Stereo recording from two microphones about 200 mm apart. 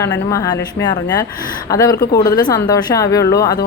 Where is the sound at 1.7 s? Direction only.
15° left (ahead or behind).